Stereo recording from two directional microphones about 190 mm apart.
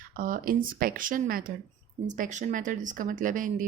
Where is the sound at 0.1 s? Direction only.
45° right (ahead or behind).